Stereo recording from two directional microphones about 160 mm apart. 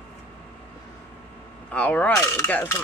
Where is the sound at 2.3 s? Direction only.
15° left (ahead or behind).